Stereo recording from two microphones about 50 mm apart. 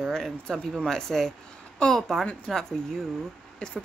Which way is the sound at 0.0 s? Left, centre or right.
Centre.